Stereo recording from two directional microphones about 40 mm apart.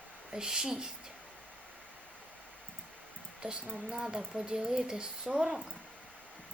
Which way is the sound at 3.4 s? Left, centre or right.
Right.